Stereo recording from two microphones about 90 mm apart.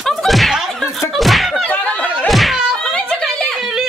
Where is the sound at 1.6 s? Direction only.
15° left (ahead or behind).